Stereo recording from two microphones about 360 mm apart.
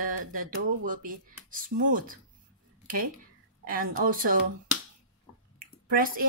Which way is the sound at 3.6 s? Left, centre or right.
Right.